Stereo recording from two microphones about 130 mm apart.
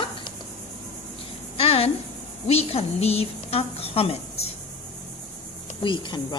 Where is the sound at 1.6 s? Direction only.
50° left (ahead or behind).